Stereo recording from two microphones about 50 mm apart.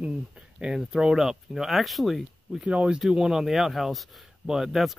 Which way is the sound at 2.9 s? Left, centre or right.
Centre.